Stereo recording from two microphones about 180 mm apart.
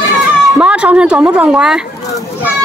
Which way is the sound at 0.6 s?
5° right (ahead or behind).